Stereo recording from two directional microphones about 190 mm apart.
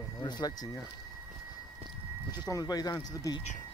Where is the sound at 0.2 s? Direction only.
20° left (ahead or behind).